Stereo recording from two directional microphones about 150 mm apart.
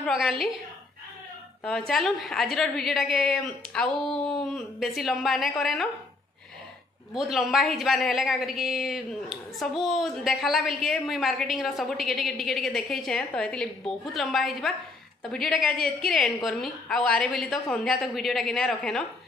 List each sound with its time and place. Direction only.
0.1 s a woman's voice: centre (ahead or behind)
1.6 s a woman's voice: centre (ahead or behind)
7.2 s a woman's voice: centre (ahead or behind)